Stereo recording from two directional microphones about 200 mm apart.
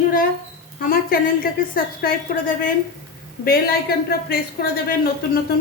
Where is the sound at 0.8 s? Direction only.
45° left (ahead or behind).